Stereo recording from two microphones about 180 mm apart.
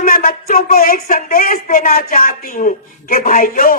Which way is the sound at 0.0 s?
50° left (ahead or behind).